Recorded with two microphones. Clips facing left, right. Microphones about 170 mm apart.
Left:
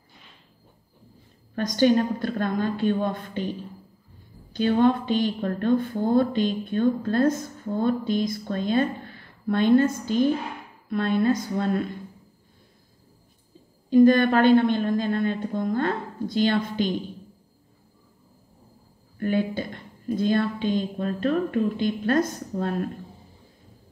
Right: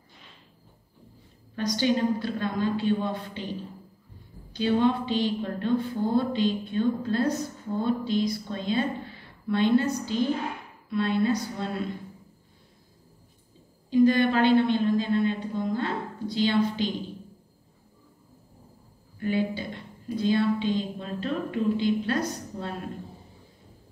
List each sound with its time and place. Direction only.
1.5 s a woman's voice: 50° left (ahead or behind)
4.5 s a woman's voice: 50° left (ahead or behind)
13.8 s a woman's voice: 50° left (ahead or behind)
19.1 s a man's voice: 50° left (ahead or behind)